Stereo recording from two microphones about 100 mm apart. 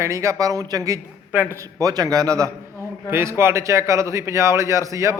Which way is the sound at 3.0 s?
25° right (ahead or behind).